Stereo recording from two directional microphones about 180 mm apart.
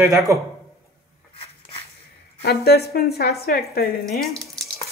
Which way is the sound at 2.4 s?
60° left (ahead or behind).